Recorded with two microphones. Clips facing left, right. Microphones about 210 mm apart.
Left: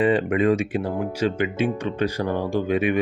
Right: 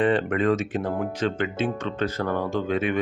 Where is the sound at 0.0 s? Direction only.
10° left (ahead or behind).